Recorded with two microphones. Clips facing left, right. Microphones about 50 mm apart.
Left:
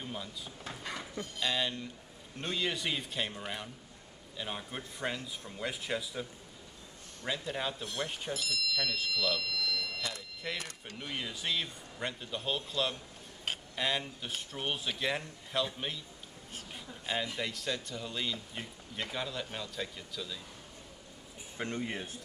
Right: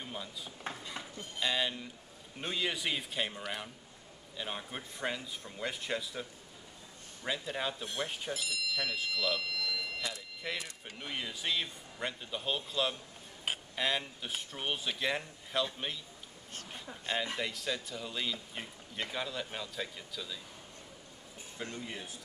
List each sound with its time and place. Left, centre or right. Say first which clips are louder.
0.0 s drawer open or close: left 1 dB; centre
1.4 s speech: right 1 dB; centre
7.2 s speech: even; centre
8.3 s speech: left 1 dB; centre
9.5 s a sound: left 1 dB; centre
10.4 s speech: even; centre
21.5 s speech: left 5 dB; left